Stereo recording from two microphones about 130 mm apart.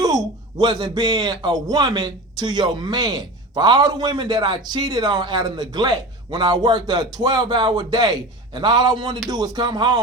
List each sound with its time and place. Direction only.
0.0 s speech: 30° right (ahead or behind)